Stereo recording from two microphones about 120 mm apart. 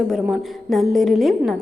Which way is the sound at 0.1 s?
Centre (ahead or behind).